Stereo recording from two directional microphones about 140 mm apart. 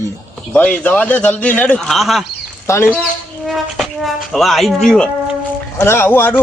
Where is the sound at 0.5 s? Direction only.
10° left (ahead or behind).